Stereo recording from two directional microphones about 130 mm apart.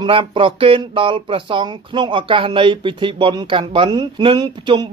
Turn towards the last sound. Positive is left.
turn(degrees=-35)  # may be behind; listen again after turning